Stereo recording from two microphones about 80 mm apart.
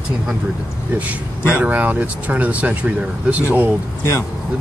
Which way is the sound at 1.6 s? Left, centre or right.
Right.